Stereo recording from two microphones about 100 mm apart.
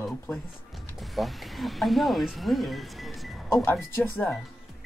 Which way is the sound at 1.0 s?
Centre (ahead or behind).